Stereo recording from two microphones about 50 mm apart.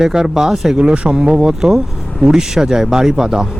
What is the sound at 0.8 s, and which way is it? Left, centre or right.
Speech, right.